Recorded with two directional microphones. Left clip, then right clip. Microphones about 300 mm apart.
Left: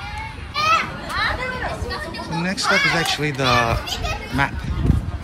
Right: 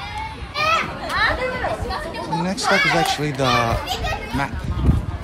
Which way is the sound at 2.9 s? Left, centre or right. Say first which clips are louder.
Right 1 dB; centre.